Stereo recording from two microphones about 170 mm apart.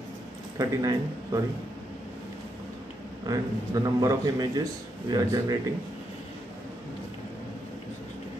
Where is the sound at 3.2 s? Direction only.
20° right (ahead or behind).